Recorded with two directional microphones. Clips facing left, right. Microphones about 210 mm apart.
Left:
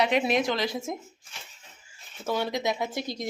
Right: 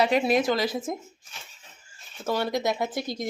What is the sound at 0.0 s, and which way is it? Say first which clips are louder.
Speech: right 2 dB; centre (ahead or behind).